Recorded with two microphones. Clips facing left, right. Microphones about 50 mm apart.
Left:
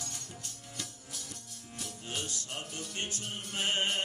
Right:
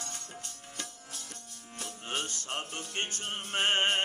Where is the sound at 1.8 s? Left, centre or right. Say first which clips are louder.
Right 3 dB; right.